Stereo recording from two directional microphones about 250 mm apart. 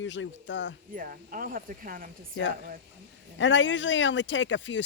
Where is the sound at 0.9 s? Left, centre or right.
Right.